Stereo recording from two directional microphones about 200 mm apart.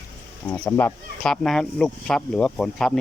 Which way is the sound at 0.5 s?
5° left (ahead or behind).